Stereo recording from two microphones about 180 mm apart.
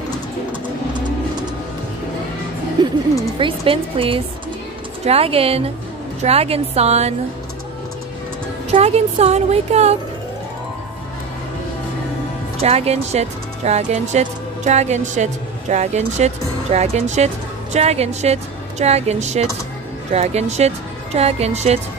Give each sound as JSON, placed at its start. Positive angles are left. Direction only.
{"t": 2.8, "sound": "a sound", "side_deg": -25}
{"t": 3.3, "sound": "speech", "side_deg": -30}
{"t": 8.6, "sound": "speech", "side_deg": -35}
{"t": 12.6, "sound": "speech", "side_deg": -35}